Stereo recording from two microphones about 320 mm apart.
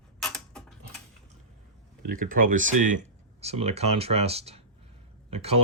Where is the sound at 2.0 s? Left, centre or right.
Right.